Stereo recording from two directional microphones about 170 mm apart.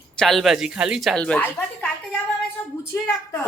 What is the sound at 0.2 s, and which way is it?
Speech, centre (ahead or behind).